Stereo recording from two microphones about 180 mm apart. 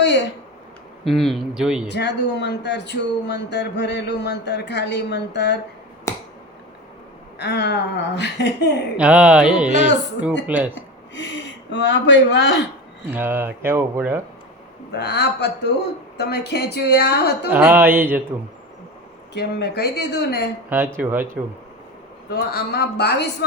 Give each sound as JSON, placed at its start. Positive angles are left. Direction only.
{"t": 1.0, "sound": "speech", "side_deg": 0}
{"t": 1.9, "sound": "speech", "side_deg": 75}
{"t": 6.1, "sound": "finger snapping", "side_deg": 15}
{"t": 7.3, "sound": "speech", "side_deg": 70}
{"t": 9.0, "sound": "speech", "side_deg": -5}
{"t": 9.7, "sound": "speech", "side_deg": 75}
{"t": 10.4, "sound": "speech", "side_deg": -10}
{"t": 10.8, "sound": "speech", "side_deg": 90}
{"t": 13.1, "sound": "speech", "side_deg": -10}
{"t": 14.9, "sound": "speech", "side_deg": 65}
{"t": 17.5, "sound": "speech", "side_deg": -10}
{"t": 19.3, "sound": "speech", "side_deg": 65}
{"t": 20.7, "sound": "speech", "side_deg": -10}
{"t": 22.3, "sound": "a man's voice", "side_deg": 60}